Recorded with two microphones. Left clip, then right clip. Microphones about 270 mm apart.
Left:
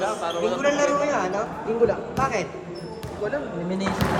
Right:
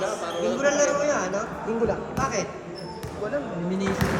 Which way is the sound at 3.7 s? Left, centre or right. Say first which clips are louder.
Left 1 dB; centre.